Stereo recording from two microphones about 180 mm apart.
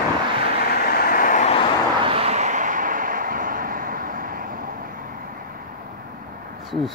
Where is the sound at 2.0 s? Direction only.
30° right (ahead or behind); by 5.5 s 55° right (ahead or behind).